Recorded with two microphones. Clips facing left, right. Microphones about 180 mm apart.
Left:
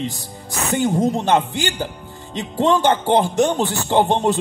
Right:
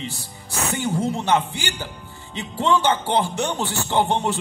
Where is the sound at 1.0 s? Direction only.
15° left (ahead or behind).